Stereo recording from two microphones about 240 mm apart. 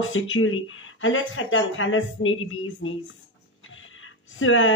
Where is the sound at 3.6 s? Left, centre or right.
Left.